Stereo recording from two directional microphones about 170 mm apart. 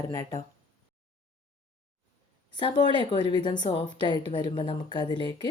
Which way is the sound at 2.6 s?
25° left (ahead or behind).